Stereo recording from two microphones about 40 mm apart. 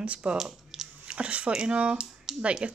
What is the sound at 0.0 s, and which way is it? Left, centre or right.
Speech, right.